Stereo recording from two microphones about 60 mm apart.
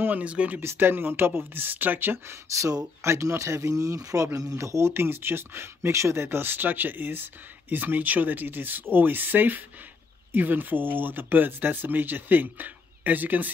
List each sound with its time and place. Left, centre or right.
0.0 s speech: right
0.6 s speech: right
2.5 s speech: right
6.2 s speech: right